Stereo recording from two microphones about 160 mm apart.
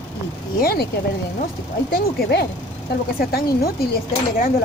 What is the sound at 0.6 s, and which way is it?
Speech, 70° left (ahead or behind).